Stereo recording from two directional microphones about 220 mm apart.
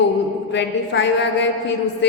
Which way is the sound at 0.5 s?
55° left (ahead or behind).